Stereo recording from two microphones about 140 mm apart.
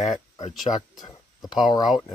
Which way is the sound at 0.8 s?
30° left (ahead or behind).